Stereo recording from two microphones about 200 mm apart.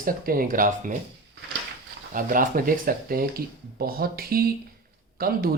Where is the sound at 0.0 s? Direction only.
45° right (ahead or behind).